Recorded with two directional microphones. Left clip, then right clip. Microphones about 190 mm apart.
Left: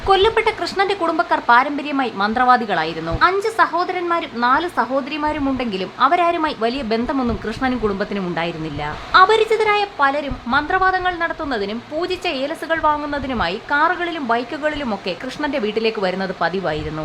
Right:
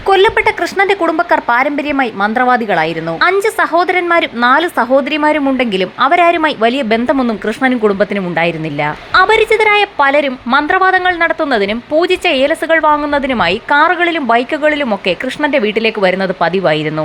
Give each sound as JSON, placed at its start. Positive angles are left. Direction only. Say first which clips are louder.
{"t": 0.1, "sound": "a woman's voice", "louder": "right 5 dB", "side_deg": -25}